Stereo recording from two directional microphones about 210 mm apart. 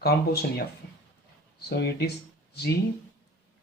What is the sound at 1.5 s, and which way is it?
Speech, 50° left (ahead or behind).